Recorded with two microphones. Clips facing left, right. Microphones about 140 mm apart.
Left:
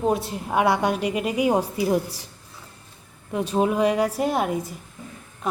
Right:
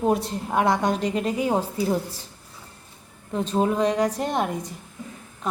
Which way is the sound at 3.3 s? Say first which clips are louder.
Left 1 dB; 10° left (ahead or behind).